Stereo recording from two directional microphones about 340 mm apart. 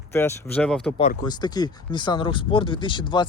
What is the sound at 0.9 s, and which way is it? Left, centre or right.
Speech, centre.